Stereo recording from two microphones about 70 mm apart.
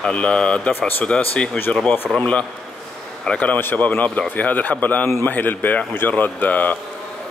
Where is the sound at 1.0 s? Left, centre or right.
Centre.